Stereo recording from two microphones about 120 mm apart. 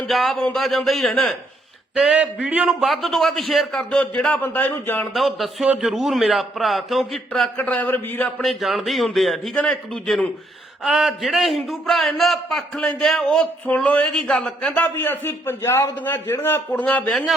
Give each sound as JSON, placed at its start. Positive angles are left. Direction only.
{"t": 0.1, "sound": "a man's voice", "side_deg": 0}
{"t": 2.0, "sound": "a man's voice", "side_deg": -5}
{"t": 5.1, "sound": "a man's voice", "side_deg": 0}
{"t": 7.5, "sound": "a man's voice", "side_deg": 15}
{"t": 8.4, "sound": "a man's voice", "side_deg": 0}
{"t": 14.9, "sound": "a man's voice", "side_deg": 20}
{"t": 16.7, "sound": "a man's voice", "side_deg": 10}